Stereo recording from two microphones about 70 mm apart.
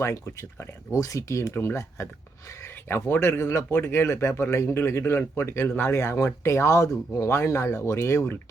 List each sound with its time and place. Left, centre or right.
0.0 s speech: left
0.9 s speech: left